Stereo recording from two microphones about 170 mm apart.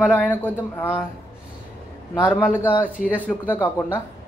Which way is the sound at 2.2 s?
10° left (ahead or behind).